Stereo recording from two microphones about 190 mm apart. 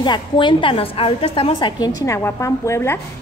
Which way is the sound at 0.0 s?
25° left (ahead or behind).